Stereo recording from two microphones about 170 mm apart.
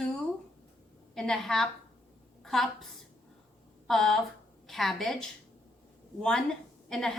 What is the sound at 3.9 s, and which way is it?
A woman's voice, centre (ahead or behind).